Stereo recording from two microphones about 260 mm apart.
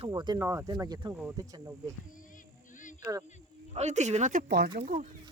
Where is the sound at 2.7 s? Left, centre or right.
Left.